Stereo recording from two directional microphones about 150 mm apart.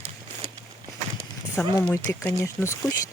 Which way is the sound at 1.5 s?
15° left (ahead or behind).